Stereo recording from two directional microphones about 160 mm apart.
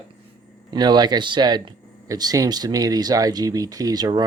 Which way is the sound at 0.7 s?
25° right (ahead or behind).